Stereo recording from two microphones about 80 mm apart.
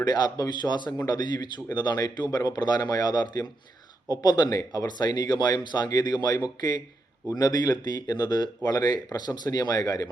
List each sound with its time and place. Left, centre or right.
0.0 s speech: left